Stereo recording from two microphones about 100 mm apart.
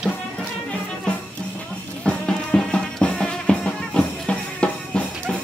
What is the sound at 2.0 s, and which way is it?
Music, 10° left (ahead or behind).